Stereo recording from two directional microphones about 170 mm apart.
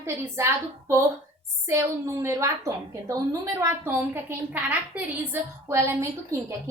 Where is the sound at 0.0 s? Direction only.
15° right (ahead or behind).